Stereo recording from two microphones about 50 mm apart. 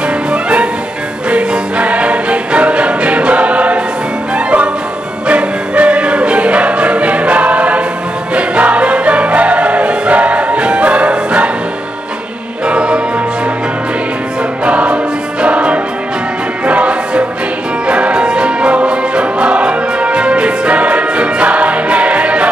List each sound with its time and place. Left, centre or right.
0.3 s music: right
5.3 s music: right
12.6 s music: centre
14.6 s music: right